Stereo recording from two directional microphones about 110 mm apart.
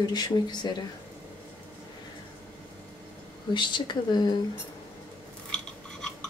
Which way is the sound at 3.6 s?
45° left (ahead or behind).